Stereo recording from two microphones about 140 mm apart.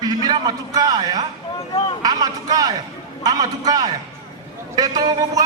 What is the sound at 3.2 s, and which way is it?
A man's voice, 30° right (ahead or behind).